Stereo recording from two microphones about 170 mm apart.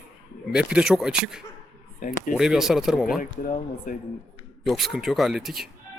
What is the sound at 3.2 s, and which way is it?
Speech, 50° left (ahead or behind).